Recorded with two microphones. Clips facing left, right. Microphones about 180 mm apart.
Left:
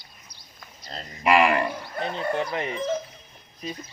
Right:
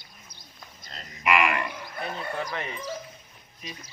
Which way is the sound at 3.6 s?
35° left (ahead or behind).